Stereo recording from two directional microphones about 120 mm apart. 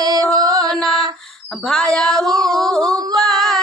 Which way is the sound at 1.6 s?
5° left (ahead or behind).